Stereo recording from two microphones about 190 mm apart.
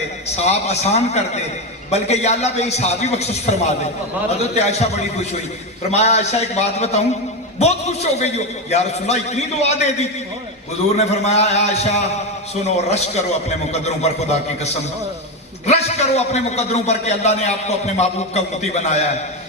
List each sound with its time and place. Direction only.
0.3 s a man's voice: 35° left (ahead or behind)